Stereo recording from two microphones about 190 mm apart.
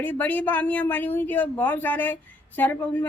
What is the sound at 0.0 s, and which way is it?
Speech, 10° left (ahead or behind).